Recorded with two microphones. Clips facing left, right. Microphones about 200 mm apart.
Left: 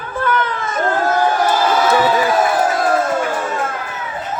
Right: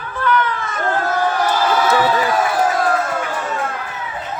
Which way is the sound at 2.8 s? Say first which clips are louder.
Left 3 dB; 45° left (ahead or behind).